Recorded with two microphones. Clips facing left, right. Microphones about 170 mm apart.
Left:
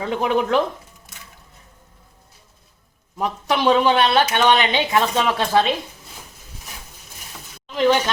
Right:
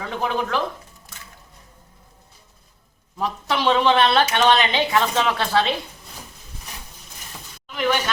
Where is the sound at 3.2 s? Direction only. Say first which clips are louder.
Left 2 dB; 15° left (ahead or behind).